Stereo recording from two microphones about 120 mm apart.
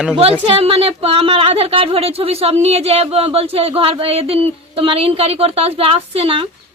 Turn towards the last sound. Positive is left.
turn(degrees=-50)  # may be behind; listen again after turning